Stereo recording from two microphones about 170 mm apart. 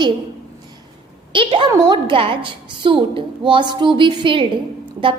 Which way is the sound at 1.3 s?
30° right (ahead or behind).